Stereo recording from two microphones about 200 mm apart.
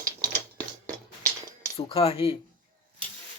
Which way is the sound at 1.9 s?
30° left (ahead or behind).